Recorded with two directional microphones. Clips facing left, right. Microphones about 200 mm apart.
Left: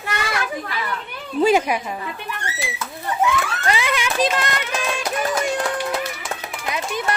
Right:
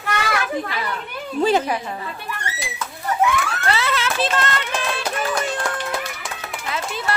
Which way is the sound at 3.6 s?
15° left (ahead or behind).